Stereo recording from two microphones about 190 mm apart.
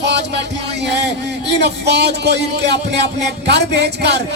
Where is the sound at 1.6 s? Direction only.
60° right (ahead or behind).